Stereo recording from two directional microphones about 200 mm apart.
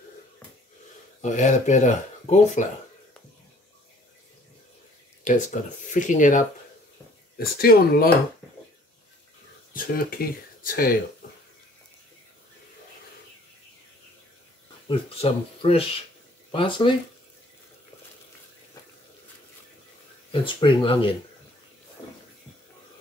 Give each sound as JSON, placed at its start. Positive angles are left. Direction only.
{"t": 1.2, "sound": "speech", "side_deg": 35}
{"t": 5.2, "sound": "speech", "side_deg": 40}
{"t": 9.8, "sound": "speech", "side_deg": 45}
{"t": 14.9, "sound": "speech", "side_deg": 30}
{"t": 20.2, "sound": "speech", "side_deg": 25}